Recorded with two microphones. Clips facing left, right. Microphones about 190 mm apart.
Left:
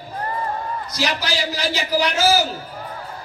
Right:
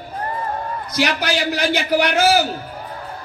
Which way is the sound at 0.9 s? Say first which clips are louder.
Right 5 dB; 60° right (ahead or behind).